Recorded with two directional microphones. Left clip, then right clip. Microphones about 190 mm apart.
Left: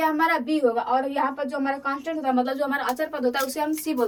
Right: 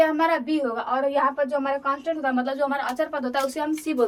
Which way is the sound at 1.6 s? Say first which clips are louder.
Right 2 dB; 5° right (ahead or behind).